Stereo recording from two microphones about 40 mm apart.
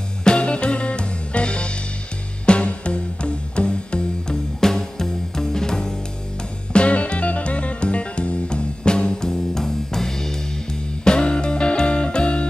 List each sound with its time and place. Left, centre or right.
0.2 s music: left
4.6 s music: centre
6.7 s music: left